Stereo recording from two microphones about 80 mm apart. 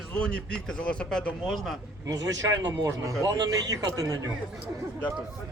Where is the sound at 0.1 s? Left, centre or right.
Centre.